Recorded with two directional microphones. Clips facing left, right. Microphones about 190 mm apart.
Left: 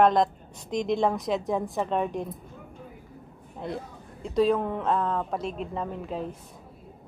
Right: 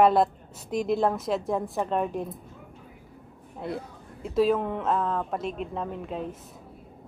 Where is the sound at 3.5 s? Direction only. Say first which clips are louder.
Right 1 dB; 5° right (ahead or behind).